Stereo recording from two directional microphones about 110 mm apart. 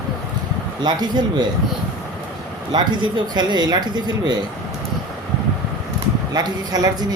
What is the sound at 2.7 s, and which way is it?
Speech, 45° right (ahead or behind).